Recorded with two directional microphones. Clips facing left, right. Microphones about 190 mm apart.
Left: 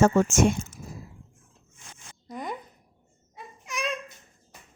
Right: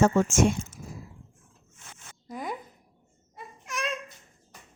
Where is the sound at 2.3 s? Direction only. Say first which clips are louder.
Even; 5° right (ahead or behind).